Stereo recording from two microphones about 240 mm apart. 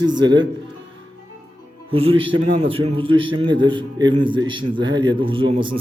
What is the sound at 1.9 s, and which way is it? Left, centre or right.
A man's voice, right.